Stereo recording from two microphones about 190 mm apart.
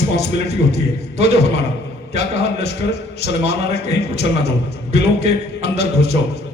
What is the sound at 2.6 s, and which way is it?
A man's voice, 60° left (ahead or behind).